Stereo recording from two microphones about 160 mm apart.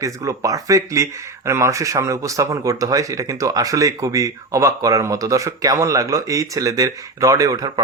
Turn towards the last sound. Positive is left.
turn(degrees=-20)  # may be behind; listen again after turning